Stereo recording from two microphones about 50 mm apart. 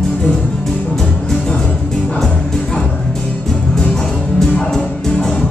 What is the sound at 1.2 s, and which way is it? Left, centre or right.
Music, centre.